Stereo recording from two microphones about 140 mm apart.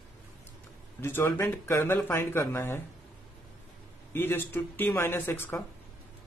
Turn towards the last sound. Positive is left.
turn(degrees=15)  # may be behind; listen again after turning